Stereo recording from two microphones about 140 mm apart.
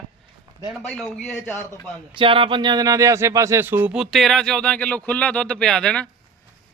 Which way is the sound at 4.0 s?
Centre (ahead or behind).